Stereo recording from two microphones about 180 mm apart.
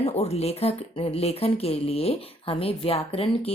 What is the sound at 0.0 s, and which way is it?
Speech, 35° left (ahead or behind).